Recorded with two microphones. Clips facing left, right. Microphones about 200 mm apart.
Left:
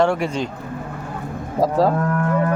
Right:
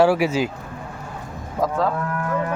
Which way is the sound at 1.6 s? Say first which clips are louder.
Left 4 dB; 35° left (ahead or behind).